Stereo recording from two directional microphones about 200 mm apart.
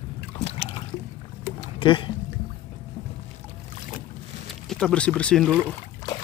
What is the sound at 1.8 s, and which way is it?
Speech, 25° left (ahead or behind).